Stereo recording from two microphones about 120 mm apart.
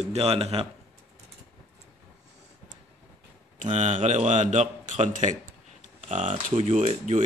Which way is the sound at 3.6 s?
85° right.